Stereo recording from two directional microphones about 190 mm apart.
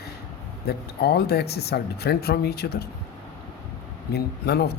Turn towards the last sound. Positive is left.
turn(degrees=60)  # may be behind; listen again after turning